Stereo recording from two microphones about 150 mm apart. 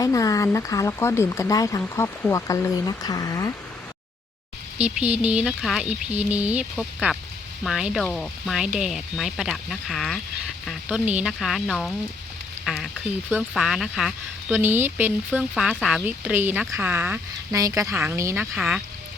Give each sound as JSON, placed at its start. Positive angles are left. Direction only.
{"t": 0.0, "sound": "speech", "side_deg": 20}
{"t": 4.8, "sound": "speech", "side_deg": -10}
{"t": 14.5, "sound": "speech", "side_deg": -15}
{"t": 18.5, "sound": "speech", "side_deg": -5}